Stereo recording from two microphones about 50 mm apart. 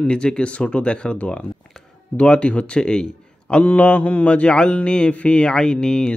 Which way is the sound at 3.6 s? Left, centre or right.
Left.